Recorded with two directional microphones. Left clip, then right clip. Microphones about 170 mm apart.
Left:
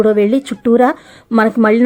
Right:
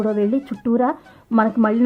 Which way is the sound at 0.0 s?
25° left (ahead or behind).